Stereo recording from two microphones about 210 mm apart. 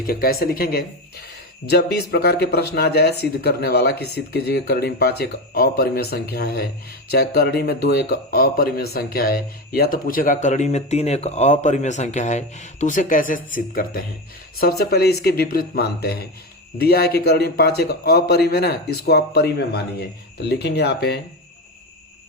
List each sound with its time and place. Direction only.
0.0 s a man's voice: 45° left (ahead or behind)